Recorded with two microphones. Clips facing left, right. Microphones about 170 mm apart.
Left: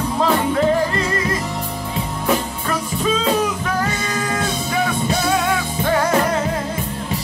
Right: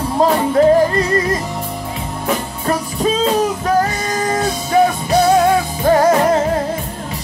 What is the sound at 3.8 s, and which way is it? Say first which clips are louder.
Music: right 5 dB; 40° right (ahead or behind).